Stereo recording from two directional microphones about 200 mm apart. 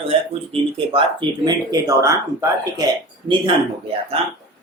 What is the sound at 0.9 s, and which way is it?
Speech, 20° right (ahead or behind).